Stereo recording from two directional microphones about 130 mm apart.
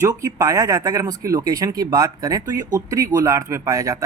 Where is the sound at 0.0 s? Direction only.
25° right (ahead or behind).